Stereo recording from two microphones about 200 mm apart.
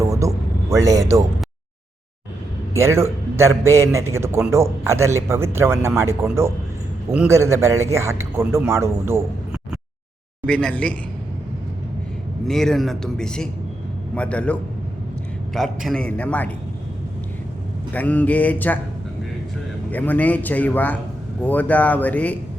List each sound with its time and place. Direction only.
0.0 s vehicle: 15° right (ahead or behind)
2.7 s a man's voice: 15° right (ahead or behind)
10.4 s speech: 5° left (ahead or behind)
12.5 s a man's voice: centre (ahead or behind)
17.9 s a man's voice: 10° left (ahead or behind)
19.9 s a man's voice: 10° left (ahead or behind)